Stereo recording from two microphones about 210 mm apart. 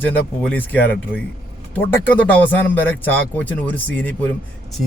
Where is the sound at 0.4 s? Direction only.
10° left (ahead or behind).